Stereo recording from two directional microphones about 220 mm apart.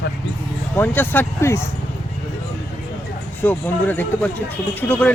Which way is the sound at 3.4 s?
10° left (ahead or behind).